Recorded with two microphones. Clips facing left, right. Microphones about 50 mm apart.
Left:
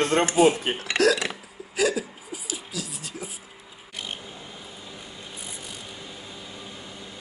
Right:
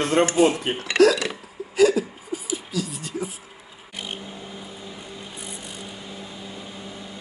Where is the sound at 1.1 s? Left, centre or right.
Centre.